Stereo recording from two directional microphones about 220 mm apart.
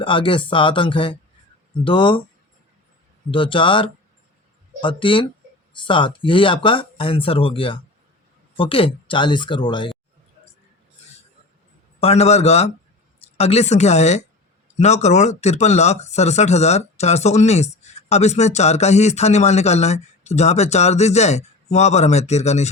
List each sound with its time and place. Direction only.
0.0 s speech: 25° left (ahead or behind)
3.3 s speech: 20° left (ahead or behind)
11.9 s speech: 30° left (ahead or behind)